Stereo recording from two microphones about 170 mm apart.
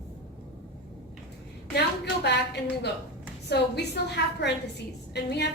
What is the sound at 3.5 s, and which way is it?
A woman's voice, 80° left.